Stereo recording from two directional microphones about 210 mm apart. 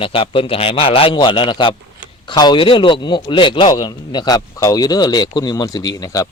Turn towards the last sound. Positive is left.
turn(degrees=15)  # may be behind; listen again after turning